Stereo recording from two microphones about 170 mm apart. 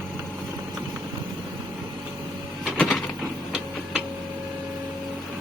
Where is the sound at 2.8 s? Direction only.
5° left (ahead or behind).